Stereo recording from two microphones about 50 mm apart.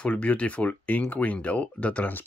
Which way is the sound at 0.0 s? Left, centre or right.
Left.